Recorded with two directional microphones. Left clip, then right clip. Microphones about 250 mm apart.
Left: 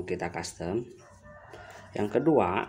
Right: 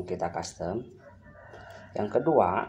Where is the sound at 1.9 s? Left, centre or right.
Left.